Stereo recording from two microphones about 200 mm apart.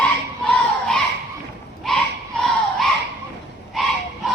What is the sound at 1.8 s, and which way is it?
Battle cry, centre (ahead or behind).